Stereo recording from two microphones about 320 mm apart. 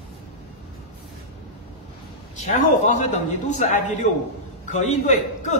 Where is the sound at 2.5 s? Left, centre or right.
Left.